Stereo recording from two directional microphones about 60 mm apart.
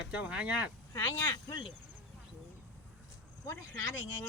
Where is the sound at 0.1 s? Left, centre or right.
Right.